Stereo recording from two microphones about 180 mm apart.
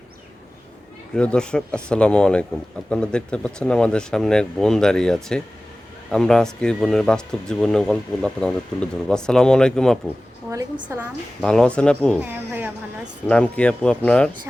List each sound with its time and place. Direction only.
1.1 s speech: 5° left (ahead or behind)
10.5 s a woman's voice: 20° right (ahead or behind)
11.3 s speech: 5° left (ahead or behind)
12.2 s a woman's voice: 10° right (ahead or behind)
13.2 s speech: 5° left (ahead or behind)